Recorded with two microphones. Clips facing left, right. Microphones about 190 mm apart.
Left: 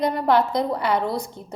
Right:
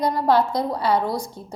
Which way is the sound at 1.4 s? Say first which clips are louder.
Right 1 dB; 20° left (ahead or behind).